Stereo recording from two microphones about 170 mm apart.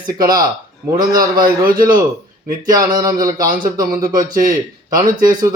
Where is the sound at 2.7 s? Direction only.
20° right (ahead or behind).